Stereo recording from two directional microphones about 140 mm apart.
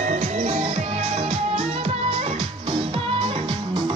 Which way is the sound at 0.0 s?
60° right (ahead or behind).